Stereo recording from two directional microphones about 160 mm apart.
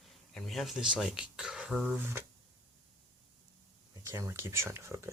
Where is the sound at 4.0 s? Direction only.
15° right (ahead or behind).